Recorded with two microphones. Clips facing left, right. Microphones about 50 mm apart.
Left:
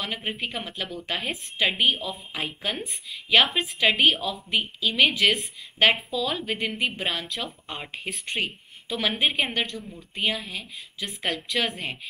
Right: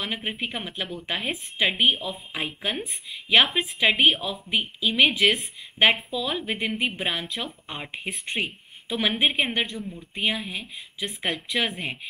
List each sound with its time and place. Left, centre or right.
0.0 s a woman's voice: centre
3.1 s a woman's voice: centre
5.8 s a woman's voice: right